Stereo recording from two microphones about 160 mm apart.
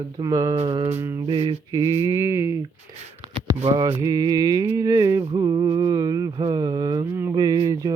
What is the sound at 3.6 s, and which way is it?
Mantra, 35° right (ahead or behind).